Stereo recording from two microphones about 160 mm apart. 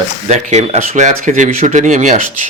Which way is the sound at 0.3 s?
45° right (ahead or behind).